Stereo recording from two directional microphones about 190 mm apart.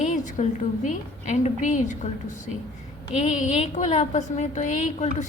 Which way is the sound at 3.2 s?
40° left (ahead or behind).